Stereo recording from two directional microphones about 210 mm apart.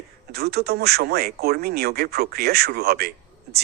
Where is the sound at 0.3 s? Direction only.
50° right (ahead or behind).